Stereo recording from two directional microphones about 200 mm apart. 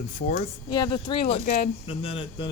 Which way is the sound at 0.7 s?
20° left (ahead or behind).